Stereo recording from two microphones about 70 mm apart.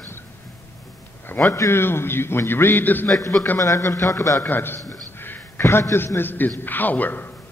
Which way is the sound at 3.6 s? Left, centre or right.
Left.